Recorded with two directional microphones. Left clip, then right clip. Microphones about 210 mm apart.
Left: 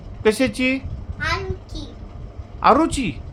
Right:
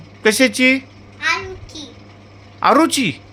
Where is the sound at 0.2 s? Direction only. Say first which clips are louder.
Right 5 dB; 10° right (ahead or behind).